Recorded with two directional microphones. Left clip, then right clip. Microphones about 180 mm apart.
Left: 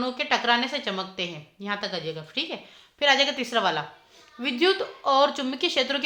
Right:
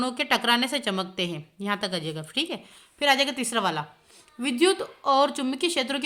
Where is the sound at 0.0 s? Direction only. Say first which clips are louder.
Even; 45° right (ahead or behind).